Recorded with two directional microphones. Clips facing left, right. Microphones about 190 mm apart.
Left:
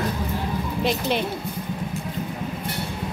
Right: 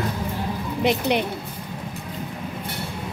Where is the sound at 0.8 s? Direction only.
20° right (ahead or behind).